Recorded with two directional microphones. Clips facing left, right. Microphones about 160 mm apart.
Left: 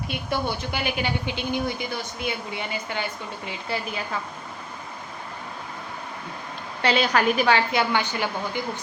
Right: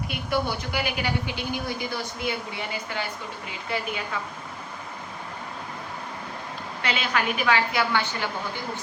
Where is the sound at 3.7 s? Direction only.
30° left (ahead or behind).